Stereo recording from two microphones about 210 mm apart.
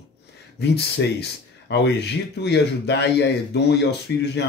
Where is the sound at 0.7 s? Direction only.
55° left (ahead or behind).